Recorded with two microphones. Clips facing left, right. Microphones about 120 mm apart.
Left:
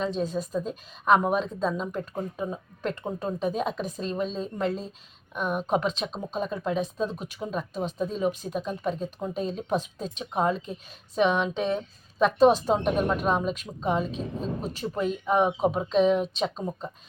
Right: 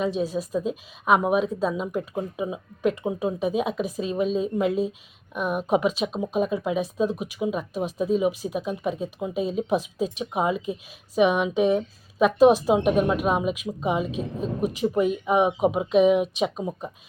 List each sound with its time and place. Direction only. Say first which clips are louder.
0.0 s a woman's voice: right 3 dB; 5° right (ahead or behind)